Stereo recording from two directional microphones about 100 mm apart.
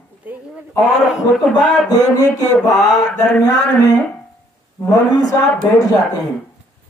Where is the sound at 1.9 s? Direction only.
40° left (ahead or behind).